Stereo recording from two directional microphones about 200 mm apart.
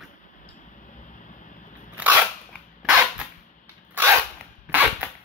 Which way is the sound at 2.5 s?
5° left (ahead or behind).